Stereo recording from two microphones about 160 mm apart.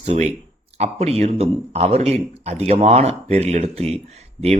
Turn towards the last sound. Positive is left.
turn(degrees=-40)  # may be behind; listen again after turning